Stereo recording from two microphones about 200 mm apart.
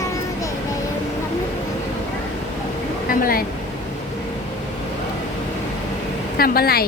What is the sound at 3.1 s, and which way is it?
Speech, 45° left (ahead or behind).